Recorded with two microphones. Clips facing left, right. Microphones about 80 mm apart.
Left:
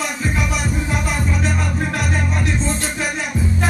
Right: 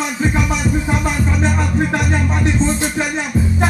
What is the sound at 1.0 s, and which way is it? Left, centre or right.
Music, right.